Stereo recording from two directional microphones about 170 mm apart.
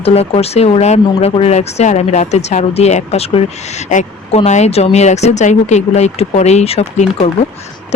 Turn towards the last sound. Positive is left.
turn(degrees=40)  # may be behind; listen again after turning